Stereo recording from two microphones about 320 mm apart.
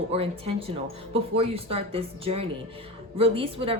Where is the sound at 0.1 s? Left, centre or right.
Centre.